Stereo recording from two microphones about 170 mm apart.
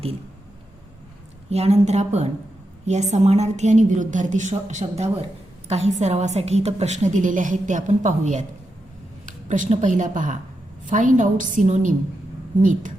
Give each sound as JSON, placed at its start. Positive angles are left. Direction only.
{"t": 1.5, "sound": "a woman's voice", "side_deg": -40}